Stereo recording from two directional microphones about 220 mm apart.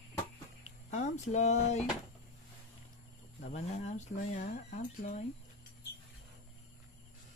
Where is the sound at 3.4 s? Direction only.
30° left (ahead or behind).